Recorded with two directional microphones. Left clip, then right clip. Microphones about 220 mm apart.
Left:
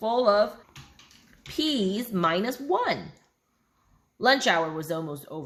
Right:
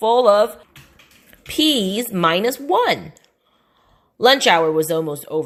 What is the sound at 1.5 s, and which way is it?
Speech, 35° right (ahead or behind).